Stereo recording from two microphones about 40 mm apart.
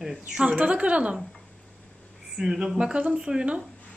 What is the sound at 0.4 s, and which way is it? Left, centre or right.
Speech, right.